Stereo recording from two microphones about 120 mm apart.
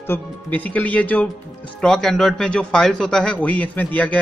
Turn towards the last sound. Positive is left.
turn(degrees=10)  # may be behind; listen again after turning